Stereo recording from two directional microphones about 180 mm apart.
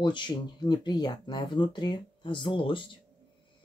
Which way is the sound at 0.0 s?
25° left (ahead or behind).